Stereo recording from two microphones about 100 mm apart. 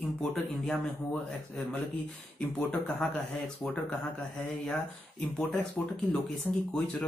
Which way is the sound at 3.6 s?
5° left (ahead or behind).